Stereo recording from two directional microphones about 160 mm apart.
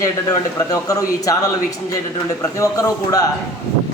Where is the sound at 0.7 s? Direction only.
20° left (ahead or behind).